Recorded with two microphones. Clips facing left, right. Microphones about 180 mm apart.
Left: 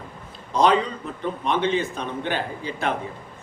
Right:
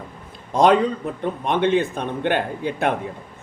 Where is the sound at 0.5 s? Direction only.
55° right (ahead or behind).